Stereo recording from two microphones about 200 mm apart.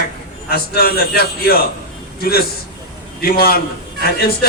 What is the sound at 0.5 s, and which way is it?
A man's voice, 50° left (ahead or behind).